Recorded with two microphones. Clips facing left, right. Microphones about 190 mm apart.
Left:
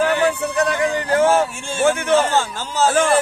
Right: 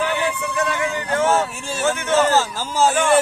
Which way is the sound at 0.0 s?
40° left (ahead or behind).